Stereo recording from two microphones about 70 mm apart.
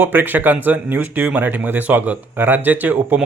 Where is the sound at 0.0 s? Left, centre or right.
Right.